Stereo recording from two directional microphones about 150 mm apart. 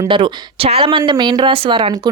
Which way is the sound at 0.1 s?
35° right (ahead or behind).